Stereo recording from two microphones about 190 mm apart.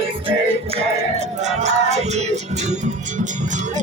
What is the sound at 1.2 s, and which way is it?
Music, 35° right (ahead or behind).